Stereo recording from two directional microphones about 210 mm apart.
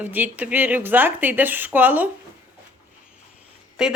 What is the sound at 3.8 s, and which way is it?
Speech, centre (ahead or behind).